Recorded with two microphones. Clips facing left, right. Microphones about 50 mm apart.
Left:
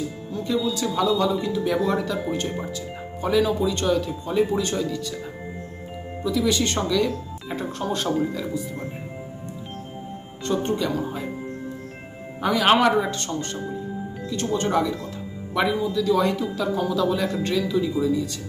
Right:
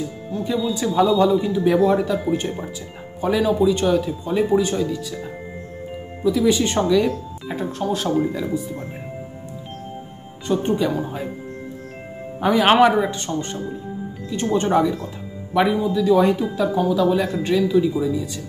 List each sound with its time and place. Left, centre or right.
0.3 s speech: centre
1.3 s speech: centre
3.2 s speech: centre
6.2 s speech: centre
7.4 s speech: centre
10.4 s speech: centre
12.4 s speech: right